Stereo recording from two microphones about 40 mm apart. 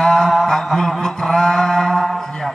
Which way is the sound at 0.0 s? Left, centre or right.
Centre.